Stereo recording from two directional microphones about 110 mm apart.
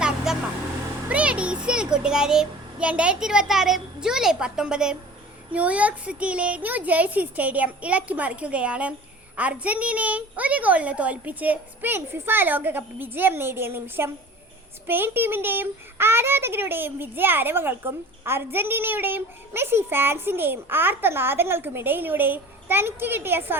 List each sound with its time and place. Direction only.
0.3 s vehicle: 5° right (ahead or behind)
1.0 s a child's voice: 10° right (ahead or behind)